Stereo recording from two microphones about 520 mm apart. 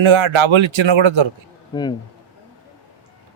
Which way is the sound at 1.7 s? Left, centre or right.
Centre.